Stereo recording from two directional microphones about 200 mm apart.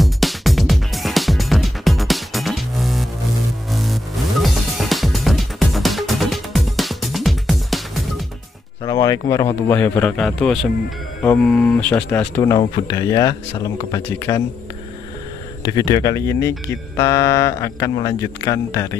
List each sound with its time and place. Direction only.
0.0 s music: centre (ahead or behind)
8.8 s speech: 20° left (ahead or behind)
15.6 s speech: 20° left (ahead or behind)